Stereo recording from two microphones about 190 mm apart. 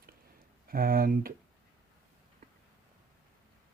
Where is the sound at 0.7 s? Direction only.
50° right (ahead or behind).